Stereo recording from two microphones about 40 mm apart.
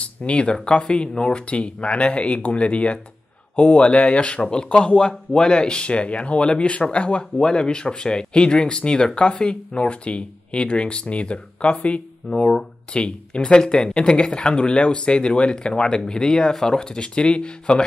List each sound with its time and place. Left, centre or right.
0.0 s speech: left